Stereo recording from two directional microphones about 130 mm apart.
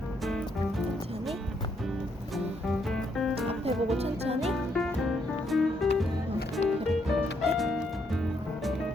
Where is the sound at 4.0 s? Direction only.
55° right (ahead or behind).